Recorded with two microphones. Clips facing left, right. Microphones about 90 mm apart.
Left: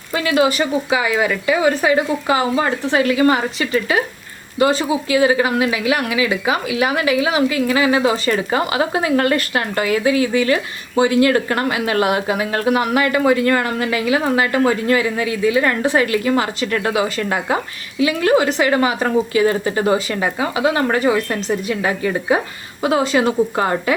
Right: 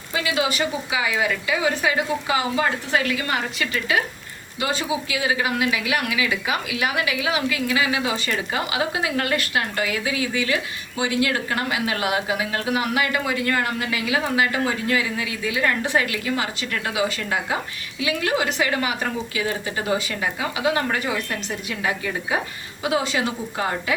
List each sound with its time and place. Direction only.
0.1 s a woman's voice: 50° left (ahead or behind)
18.0 s a woman's voice: 40° left (ahead or behind)